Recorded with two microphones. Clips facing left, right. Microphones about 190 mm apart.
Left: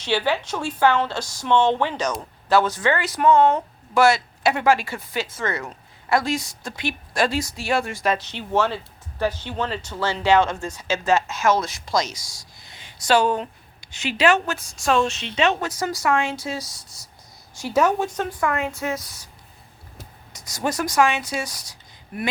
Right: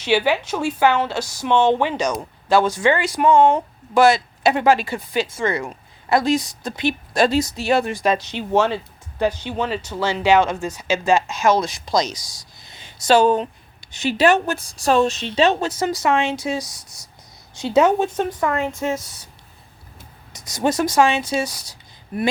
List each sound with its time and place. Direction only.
0.0 s a woman's voice: 10° right (ahead or behind)
14.0 s speech: 45° right (ahead or behind)
14.6 s speech: 35° right (ahead or behind)
20.3 s speech: 20° right (ahead or behind)